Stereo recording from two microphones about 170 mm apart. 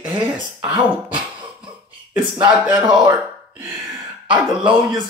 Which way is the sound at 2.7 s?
25° right (ahead or behind).